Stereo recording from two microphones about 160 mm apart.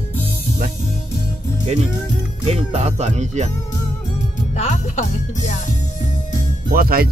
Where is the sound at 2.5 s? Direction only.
40° right (ahead or behind).